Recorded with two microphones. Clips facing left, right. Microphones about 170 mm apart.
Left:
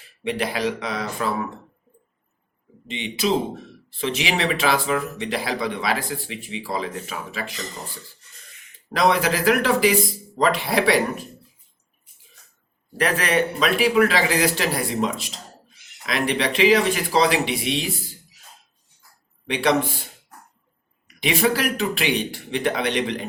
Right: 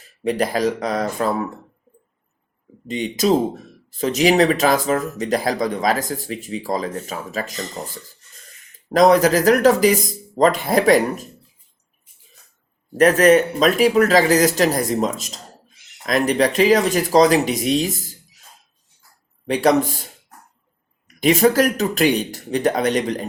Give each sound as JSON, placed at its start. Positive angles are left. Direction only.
{"t": 0.0, "sound": "speech", "side_deg": -40}
{"t": 2.8, "sound": "speech", "side_deg": -45}
{"t": 8.9, "sound": "speech", "side_deg": -40}
{"t": 13.0, "sound": "speech", "side_deg": -45}
{"t": 19.5, "sound": "speech", "side_deg": -40}
{"t": 21.2, "sound": "speech", "side_deg": -45}